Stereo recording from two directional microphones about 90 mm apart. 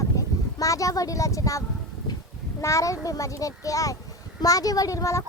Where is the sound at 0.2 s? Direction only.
40° left (ahead or behind).